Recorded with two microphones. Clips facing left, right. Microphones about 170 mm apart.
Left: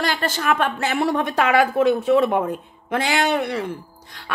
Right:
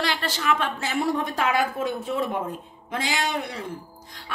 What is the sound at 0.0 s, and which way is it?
A woman's voice, 50° left (ahead or behind).